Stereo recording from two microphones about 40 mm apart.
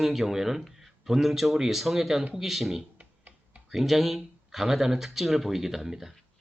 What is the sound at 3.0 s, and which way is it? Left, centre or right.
Typing, right.